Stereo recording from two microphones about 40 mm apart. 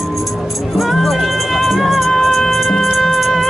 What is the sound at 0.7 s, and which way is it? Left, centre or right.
Music, centre.